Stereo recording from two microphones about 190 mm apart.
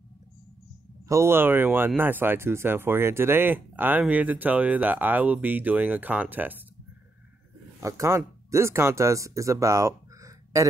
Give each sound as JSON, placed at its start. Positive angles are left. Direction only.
{"t": 1.0, "sound": "speech", "side_deg": -15}
{"t": 7.8, "sound": "speech", "side_deg": -15}